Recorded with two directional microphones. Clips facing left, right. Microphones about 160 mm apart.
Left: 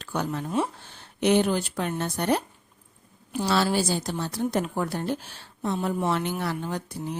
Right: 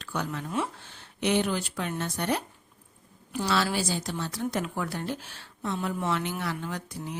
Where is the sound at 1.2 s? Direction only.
40° left (ahead or behind).